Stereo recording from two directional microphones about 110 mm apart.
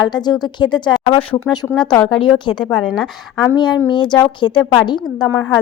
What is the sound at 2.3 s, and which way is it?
A woman's voice, 45° left (ahead or behind).